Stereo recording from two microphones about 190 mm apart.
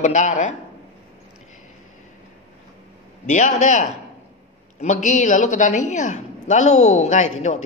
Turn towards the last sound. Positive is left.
turn(degrees=40)  # may be behind; listen again after turning